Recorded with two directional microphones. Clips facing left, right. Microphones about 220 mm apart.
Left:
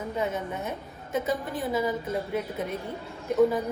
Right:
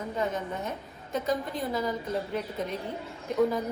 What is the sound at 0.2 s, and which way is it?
A woman's voice, 5° left (ahead or behind).